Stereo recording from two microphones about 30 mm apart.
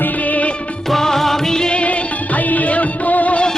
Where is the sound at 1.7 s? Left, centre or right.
Left.